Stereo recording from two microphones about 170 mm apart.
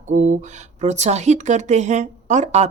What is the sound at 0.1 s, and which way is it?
Speech, 45° right (ahead or behind).